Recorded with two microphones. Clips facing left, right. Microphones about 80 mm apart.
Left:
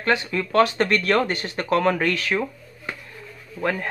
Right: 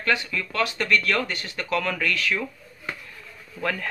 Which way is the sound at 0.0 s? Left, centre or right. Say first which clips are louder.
Left 3 dB; left.